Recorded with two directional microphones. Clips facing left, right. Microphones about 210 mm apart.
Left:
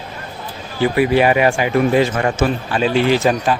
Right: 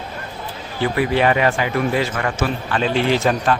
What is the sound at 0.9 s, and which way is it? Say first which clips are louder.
A man's voice: left 3 dB; 10° left (ahead or behind).